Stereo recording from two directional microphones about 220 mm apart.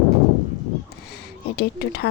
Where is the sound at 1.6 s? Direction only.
45° left (ahead or behind).